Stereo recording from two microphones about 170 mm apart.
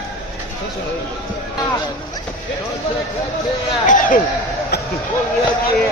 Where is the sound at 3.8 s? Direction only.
50° left (ahead or behind).